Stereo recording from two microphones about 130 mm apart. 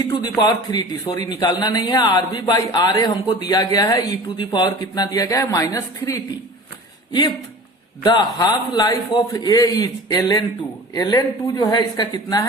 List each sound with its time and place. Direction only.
0.0 s a man's voice: 30° left (ahead or behind)
8.0 s a man's voice: 35° left (ahead or behind)